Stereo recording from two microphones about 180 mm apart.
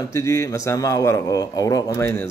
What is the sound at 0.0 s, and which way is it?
A man's voice, 15° left (ahead or behind).